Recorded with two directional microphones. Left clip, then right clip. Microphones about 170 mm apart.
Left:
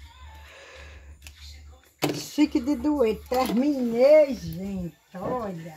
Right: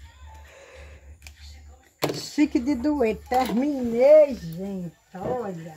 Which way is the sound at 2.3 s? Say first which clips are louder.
Right 1 dB; 25° right (ahead or behind).